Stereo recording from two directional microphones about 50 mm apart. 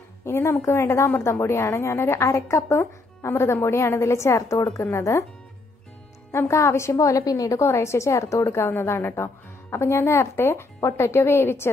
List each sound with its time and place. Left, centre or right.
0.2 s a woman's voice: left
6.3 s a woman's voice: left